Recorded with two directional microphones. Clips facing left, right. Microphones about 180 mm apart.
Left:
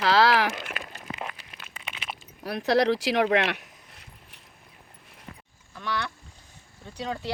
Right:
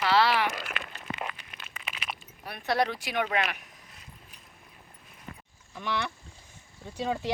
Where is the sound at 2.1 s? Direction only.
90° left.